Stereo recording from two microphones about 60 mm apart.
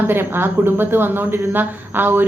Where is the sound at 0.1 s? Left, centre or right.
Right.